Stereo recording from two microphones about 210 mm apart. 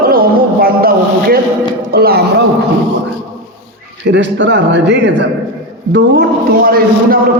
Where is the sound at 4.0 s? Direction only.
55° right (ahead or behind).